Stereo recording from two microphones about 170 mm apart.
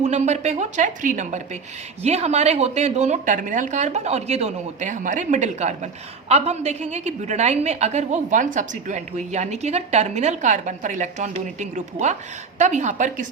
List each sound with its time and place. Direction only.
0.0 s a woman's voice: 40° right (ahead or behind)